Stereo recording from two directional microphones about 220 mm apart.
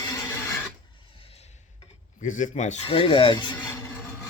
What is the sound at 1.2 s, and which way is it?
Rub, 30° left (ahead or behind).